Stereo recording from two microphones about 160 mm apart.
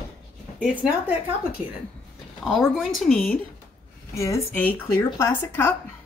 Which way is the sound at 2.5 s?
Centre (ahead or behind).